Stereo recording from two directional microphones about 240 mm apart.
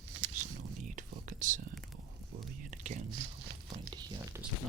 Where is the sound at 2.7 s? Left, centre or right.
Right.